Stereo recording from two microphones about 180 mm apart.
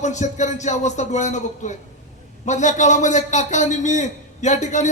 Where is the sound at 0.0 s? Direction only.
40° left (ahead or behind).